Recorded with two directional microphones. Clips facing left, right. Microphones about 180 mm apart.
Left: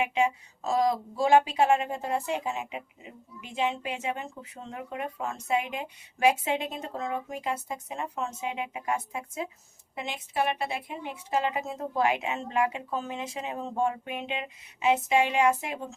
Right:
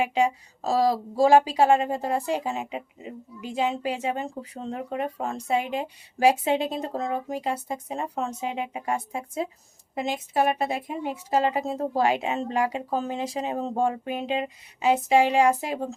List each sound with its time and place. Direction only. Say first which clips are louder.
0.0 s speech: right 3 dB; 35° right (ahead or behind)